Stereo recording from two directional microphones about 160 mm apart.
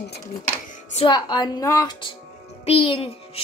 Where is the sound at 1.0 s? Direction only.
25° left (ahead or behind).